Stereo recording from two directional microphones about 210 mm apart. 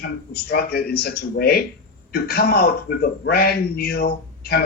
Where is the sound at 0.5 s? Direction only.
50° left (ahead or behind).